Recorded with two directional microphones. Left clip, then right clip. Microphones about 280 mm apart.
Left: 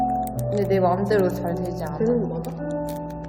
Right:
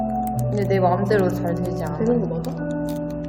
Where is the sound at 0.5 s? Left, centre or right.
Centre.